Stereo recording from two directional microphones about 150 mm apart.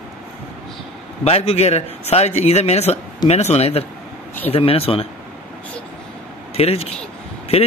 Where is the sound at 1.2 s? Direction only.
45° left (ahead or behind).